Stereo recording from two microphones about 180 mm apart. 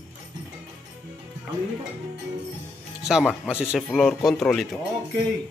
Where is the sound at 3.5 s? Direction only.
5° right (ahead or behind).